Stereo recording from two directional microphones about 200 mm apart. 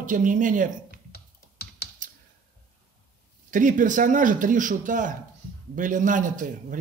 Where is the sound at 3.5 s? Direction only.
40° right (ahead or behind).